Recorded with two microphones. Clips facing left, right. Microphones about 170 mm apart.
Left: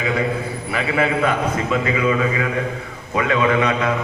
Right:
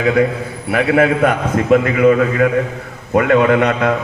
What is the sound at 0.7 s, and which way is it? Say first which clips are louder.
A man's voice: right 7 dB; 60° right (ahead or behind).